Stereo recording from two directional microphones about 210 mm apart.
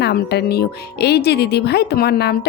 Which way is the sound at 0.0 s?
50° left (ahead or behind).